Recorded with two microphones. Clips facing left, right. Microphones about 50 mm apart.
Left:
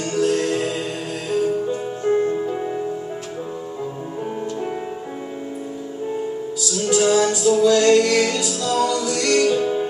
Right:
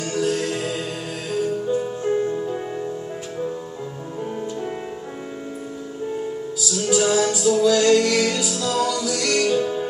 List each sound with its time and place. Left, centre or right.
0.0 s music: centre
6.7 s music: centre